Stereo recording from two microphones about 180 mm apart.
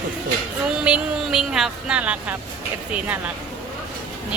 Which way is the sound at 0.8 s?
5° right (ahead or behind).